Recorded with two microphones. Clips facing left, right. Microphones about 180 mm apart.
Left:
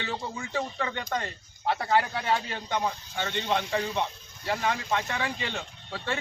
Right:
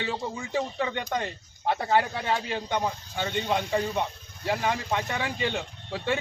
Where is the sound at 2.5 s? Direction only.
15° right (ahead or behind).